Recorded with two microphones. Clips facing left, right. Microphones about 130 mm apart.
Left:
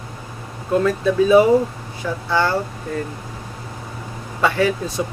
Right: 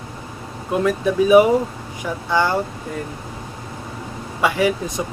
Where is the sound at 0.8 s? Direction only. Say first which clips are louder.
Right 1 dB; 15° right (ahead or behind).